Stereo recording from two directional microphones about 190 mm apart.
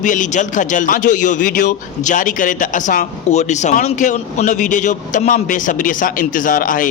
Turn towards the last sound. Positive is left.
turn(degrees=45)  # may be behind; listen again after turning